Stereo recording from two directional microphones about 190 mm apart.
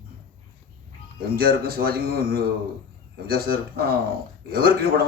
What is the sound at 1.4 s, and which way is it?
A man's voice, 55° right (ahead or behind).